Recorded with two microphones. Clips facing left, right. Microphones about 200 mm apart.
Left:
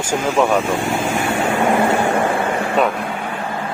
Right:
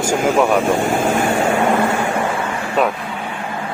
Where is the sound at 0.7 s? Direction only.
45° right (ahead or behind).